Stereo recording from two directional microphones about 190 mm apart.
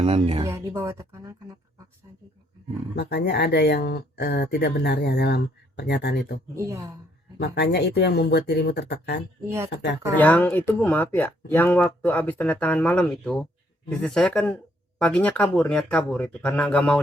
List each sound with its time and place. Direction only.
0.0 s speech: 30° right (ahead or behind)
0.4 s speech: 15° right (ahead or behind)
2.9 s speech: 60° left (ahead or behind)
6.6 s speech: 15° right (ahead or behind)
7.3 s speech: 60° left (ahead or behind)
10.2 s speech: 10° left (ahead or behind)